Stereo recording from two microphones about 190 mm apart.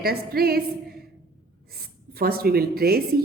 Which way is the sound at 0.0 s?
55° right (ahead or behind).